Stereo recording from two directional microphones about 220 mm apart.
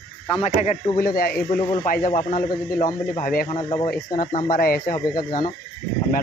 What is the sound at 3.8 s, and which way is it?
Speech, 40° left (ahead or behind).